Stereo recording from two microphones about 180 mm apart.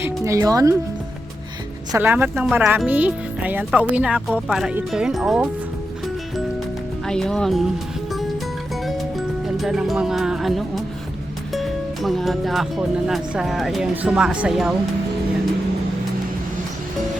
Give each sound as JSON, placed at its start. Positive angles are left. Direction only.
{"t": 0.3, "sound": "speech", "side_deg": -20}
{"t": 1.9, "sound": "speech", "side_deg": -10}
{"t": 7.0, "sound": "speech", "side_deg": 5}
{"t": 8.7, "sound": "music", "side_deg": 0}
{"t": 11.5, "sound": "speech", "side_deg": 0}